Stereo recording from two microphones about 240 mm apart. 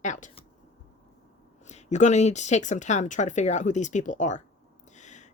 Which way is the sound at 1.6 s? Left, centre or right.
Left.